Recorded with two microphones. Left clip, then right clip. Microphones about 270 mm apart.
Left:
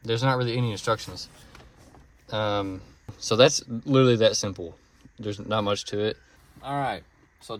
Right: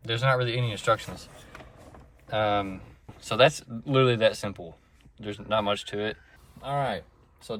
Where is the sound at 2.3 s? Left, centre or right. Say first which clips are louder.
Right 1 dB; centre.